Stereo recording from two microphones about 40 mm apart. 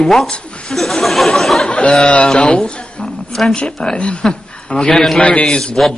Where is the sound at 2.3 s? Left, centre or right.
Left.